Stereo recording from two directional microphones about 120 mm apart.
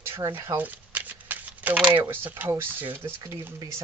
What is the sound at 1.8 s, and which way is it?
Speech, 15° right (ahead or behind).